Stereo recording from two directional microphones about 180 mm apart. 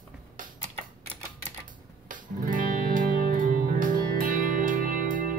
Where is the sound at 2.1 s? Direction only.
50° right (ahead or behind).